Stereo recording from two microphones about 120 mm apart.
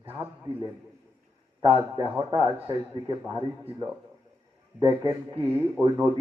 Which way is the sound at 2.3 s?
25° right (ahead or behind).